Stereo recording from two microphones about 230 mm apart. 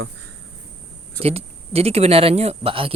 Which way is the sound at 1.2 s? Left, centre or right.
Right.